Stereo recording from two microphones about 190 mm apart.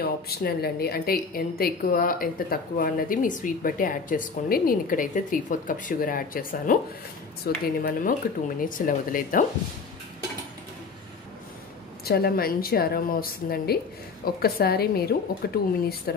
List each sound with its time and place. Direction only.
0.0 s a woman's voice: 55° left (ahead or behind)
12.0 s a woman's voice: 55° left (ahead or behind)